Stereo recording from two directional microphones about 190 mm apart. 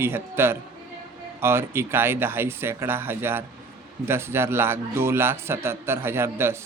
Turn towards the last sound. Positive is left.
turn(degrees=-15)  # may be behind; listen again after turning